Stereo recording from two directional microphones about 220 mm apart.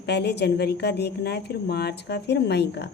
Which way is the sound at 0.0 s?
50° left (ahead or behind).